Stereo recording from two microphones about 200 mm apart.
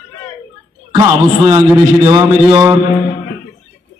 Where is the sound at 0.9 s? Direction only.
20° right (ahead or behind).